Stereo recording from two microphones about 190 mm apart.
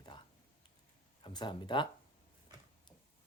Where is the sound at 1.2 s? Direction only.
25° left (ahead or behind).